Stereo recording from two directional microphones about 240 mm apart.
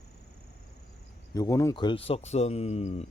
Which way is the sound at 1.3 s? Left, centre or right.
Centre.